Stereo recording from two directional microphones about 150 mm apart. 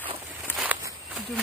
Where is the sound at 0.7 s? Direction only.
10° right (ahead or behind).